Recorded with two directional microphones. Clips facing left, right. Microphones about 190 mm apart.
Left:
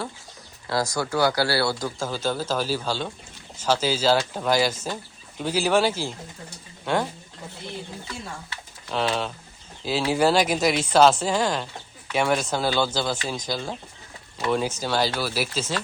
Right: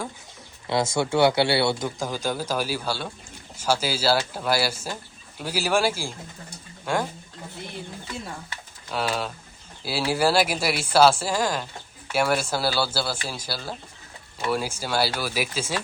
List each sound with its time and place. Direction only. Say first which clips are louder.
0.7 s speech: right 2 dB; 25° right (ahead or behind); by 7.0 s 10° right (ahead or behind)
8.9 s speech: left 2 dB; 5° right (ahead or behind)